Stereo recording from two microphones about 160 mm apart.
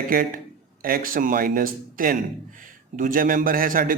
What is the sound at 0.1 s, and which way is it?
A man's voice, 60° right (ahead or behind).